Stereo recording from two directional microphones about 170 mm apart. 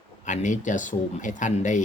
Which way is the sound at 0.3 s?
45° left (ahead or behind).